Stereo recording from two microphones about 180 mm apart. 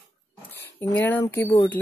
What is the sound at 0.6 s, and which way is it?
Speech, 10° left (ahead or behind).